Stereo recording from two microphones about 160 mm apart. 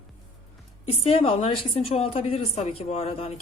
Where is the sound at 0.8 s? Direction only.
40° left (ahead or behind).